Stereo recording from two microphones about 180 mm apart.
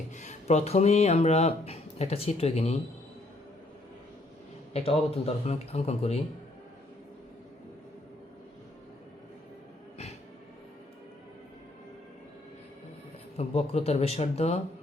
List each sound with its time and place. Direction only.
0.2 s speech: 40° left (ahead or behind)
4.7 s speech: 35° left (ahead or behind)
13.3 s speech: 35° left (ahead or behind)